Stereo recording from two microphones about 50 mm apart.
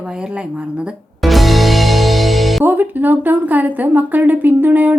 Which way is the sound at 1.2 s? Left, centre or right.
Centre.